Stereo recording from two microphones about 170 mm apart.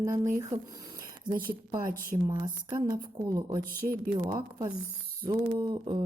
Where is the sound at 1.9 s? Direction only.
55° right (ahead or behind).